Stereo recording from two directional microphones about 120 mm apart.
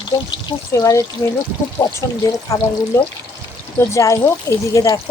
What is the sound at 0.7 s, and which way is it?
Speech, 25° left (ahead or behind).